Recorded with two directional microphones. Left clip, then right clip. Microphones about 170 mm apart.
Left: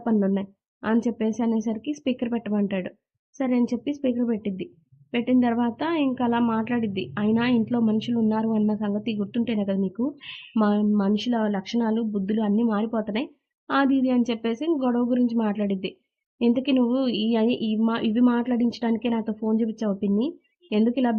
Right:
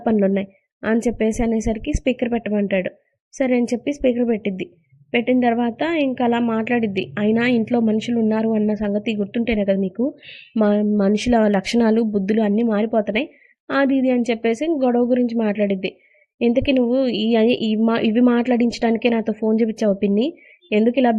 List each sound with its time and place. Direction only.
0.0 s a woman's voice: 15° right (ahead or behind)